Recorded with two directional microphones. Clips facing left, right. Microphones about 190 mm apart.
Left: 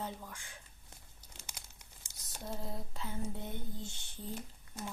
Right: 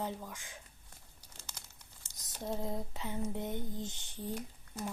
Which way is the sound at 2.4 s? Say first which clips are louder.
Right 5 dB; 20° right (ahead or behind).